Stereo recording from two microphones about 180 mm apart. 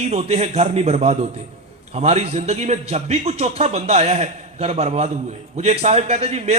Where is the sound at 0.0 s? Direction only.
35° right (ahead or behind).